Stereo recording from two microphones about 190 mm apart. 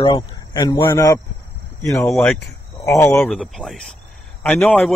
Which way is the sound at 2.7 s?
15° left (ahead or behind).